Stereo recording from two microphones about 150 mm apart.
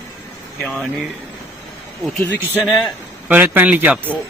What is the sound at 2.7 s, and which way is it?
Speech, centre (ahead or behind).